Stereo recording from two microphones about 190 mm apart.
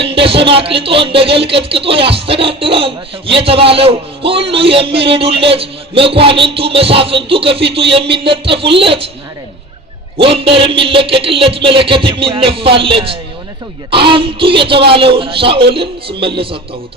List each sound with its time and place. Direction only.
0.0 s a man's voice: 30° right (ahead or behind)
10.2 s a man's voice: 30° right (ahead or behind)